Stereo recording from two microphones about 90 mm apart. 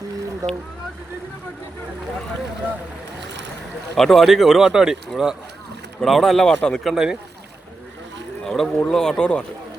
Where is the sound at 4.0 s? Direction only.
Centre (ahead or behind).